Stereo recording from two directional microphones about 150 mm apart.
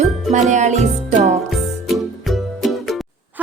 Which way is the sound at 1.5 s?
Centre (ahead or behind).